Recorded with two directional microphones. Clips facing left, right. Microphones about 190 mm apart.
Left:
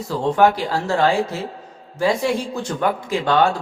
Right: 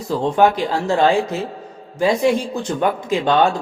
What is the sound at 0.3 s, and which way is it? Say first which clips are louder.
A man's voice: right 1 dB; 20° right (ahead or behind).